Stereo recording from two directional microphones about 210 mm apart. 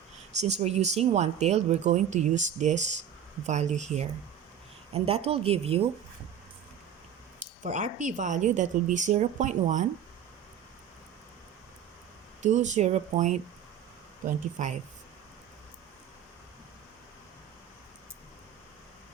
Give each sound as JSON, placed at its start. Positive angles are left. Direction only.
{"t": 0.3, "sound": "speech", "side_deg": -30}
{"t": 7.6, "sound": "speech", "side_deg": -35}
{"t": 12.4, "sound": "speech", "side_deg": -35}
{"t": 14.6, "sound": "speech", "side_deg": -35}